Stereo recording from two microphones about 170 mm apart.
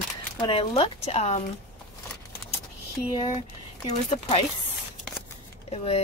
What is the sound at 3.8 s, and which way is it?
Speech, 40° left (ahead or behind).